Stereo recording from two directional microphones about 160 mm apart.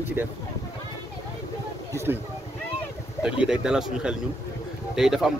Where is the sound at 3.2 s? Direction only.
5° right (ahead or behind).